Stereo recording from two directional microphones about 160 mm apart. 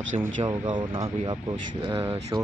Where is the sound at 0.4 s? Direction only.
30° right (ahead or behind).